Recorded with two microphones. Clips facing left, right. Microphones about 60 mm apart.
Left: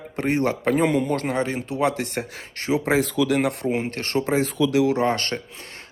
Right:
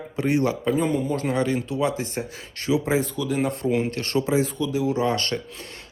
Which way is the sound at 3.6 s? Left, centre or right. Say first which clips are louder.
Right 1 dB; left.